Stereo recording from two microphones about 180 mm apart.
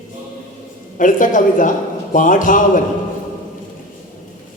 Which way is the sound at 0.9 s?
45° left (ahead or behind).